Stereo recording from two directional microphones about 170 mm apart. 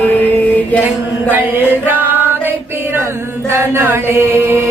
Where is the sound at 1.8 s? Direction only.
10° right (ahead or behind).